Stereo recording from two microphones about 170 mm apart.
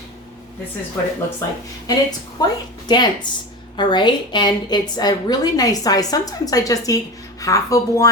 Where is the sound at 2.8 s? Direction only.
25° left (ahead or behind).